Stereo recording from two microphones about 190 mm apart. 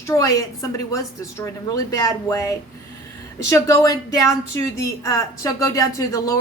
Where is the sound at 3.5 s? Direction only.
15° left (ahead or behind).